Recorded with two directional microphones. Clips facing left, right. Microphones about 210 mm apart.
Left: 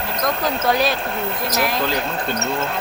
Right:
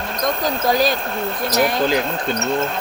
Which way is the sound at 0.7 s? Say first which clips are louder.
Right 2 dB; 65° left (ahead or behind).